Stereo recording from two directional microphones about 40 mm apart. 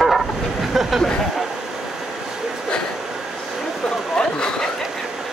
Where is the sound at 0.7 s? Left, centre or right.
Centre.